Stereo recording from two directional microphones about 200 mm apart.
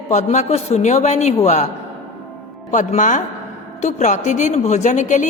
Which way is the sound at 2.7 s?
40° left (ahead or behind).